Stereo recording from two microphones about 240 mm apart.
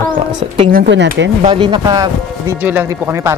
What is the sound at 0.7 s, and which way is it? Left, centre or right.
Speech, right.